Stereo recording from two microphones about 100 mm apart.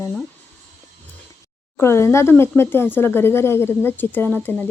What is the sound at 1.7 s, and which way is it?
Speech, 25° left (ahead or behind).